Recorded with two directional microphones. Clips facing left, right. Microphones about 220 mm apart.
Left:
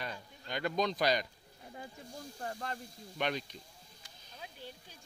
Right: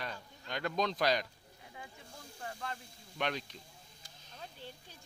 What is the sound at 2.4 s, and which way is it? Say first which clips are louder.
Speech: left 2 dB; 45° left (ahead or behind).